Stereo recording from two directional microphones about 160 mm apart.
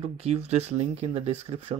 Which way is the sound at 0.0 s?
40° right (ahead or behind).